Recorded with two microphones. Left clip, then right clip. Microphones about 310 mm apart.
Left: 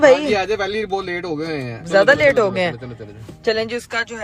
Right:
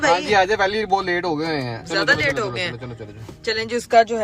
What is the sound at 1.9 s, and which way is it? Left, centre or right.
Speech, centre.